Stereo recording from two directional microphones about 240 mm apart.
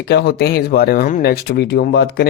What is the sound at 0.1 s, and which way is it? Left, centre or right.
A man's voice, left.